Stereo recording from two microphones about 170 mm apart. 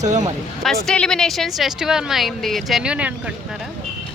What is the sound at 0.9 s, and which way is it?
Speech, 5° left (ahead or behind).